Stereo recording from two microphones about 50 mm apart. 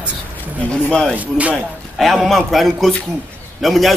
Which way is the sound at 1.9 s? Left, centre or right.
Centre.